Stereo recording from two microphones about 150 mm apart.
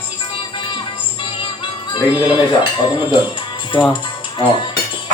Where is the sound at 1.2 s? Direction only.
35° left (ahead or behind).